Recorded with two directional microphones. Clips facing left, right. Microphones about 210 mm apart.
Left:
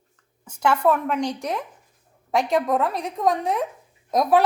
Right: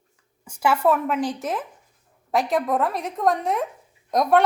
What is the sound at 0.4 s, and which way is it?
A woman's voice, 10° right (ahead or behind).